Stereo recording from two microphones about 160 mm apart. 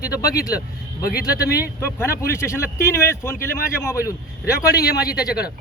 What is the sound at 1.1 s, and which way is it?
Speech, 70° left (ahead or behind).